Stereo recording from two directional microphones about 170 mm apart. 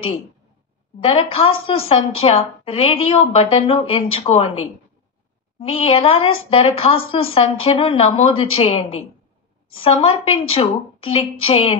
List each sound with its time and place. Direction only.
1.0 s a woman's voice: 35° left (ahead or behind)